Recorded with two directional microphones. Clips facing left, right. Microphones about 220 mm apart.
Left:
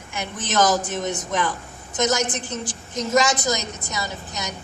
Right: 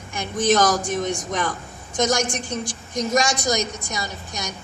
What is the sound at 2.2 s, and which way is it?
A man's voice, 10° right (ahead or behind).